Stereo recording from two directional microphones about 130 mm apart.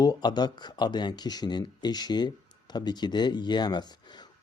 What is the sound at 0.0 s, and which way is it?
Speech, 30° left (ahead or behind).